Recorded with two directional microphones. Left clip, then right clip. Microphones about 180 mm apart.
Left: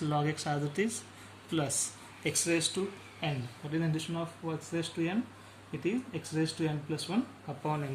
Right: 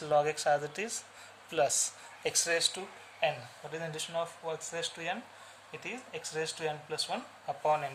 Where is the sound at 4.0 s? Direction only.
45° right (ahead or behind).